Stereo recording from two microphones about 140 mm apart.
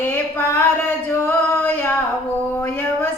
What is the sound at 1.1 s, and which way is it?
Female singing, 15° left (ahead or behind).